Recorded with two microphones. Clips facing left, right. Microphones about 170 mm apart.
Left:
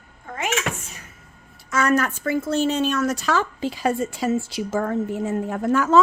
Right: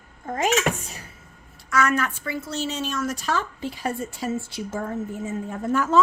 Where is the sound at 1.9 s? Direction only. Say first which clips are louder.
Left 5 dB; 45° left (ahead or behind); by 5.9 s 80° left.